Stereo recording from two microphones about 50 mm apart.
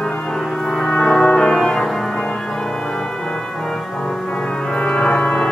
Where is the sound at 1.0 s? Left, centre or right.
Centre.